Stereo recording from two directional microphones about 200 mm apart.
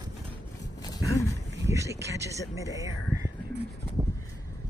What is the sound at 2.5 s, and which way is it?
Speech, 15° right (ahead or behind).